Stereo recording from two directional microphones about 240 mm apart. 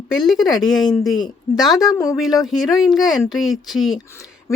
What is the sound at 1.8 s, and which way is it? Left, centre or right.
Speech, centre.